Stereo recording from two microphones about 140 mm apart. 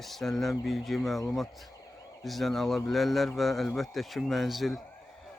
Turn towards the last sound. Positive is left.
turn(degrees=0)  # may be behind; listen again after turning